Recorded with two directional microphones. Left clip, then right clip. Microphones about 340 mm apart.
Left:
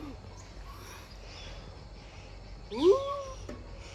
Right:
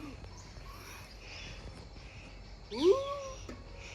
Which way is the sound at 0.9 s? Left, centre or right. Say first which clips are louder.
Left 1 dB; centre.